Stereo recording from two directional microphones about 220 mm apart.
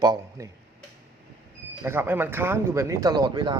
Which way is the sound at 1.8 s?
10° right (ahead or behind).